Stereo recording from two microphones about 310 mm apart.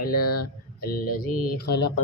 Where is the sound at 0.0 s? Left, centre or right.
Left.